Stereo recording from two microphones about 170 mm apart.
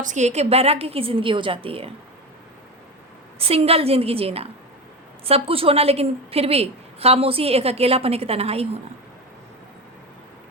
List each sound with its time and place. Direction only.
0.0 s a woman's voice: 45° right (ahead or behind)
3.3 s a woman's voice: 35° right (ahead or behind)